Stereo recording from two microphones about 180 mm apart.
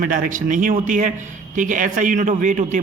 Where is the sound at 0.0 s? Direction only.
50° right (ahead or behind).